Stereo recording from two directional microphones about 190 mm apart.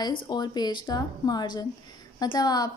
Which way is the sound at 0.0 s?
20° left (ahead or behind).